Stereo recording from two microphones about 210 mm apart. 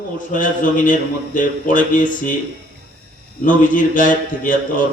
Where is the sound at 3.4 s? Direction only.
40° left (ahead or behind).